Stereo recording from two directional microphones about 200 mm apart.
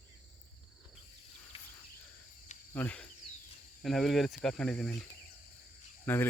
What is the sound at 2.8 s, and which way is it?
Speech, 5° left (ahead or behind).